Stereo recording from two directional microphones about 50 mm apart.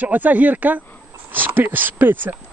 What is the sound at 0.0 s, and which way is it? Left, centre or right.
Speech, right.